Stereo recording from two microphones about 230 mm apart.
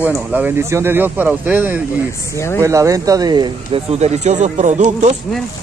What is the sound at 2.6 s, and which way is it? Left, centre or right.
Speech, centre.